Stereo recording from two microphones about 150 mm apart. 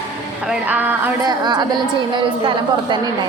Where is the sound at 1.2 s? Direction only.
25° right (ahead or behind).